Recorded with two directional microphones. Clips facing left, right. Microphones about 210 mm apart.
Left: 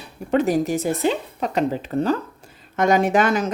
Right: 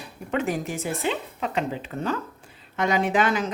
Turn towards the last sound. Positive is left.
turn(degrees=45)  # may be behind; listen again after turning